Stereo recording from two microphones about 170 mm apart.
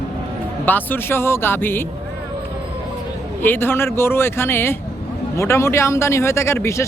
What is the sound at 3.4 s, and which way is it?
Speech, 10° left (ahead or behind).